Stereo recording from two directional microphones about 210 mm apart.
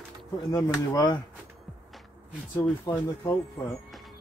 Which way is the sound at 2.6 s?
15° left (ahead or behind).